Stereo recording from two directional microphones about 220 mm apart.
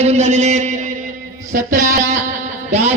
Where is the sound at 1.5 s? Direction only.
40° right (ahead or behind).